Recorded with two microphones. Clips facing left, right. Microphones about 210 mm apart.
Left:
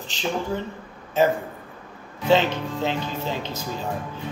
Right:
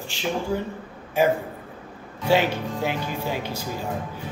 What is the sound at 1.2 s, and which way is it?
Speech, 10° right (ahead or behind).